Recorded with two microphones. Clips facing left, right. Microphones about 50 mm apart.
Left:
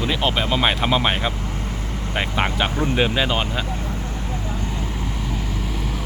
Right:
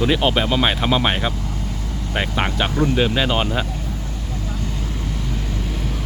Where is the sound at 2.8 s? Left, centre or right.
Centre.